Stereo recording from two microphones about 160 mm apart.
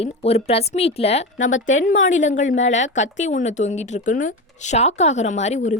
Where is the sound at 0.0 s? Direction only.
40° left (ahead or behind).